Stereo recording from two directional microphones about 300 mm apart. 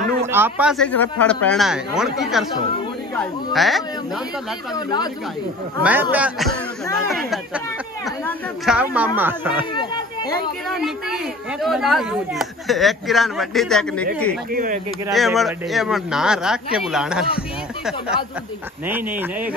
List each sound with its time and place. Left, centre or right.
0.3 s a man's voice: centre
3.5 s a man's voice: centre
4.7 s speech: centre
5.8 s a man's voice: centre
9.8 s chatter: centre
10.7 s a man's voice: centre
14.5 s speech: right
15.1 s a man's voice: centre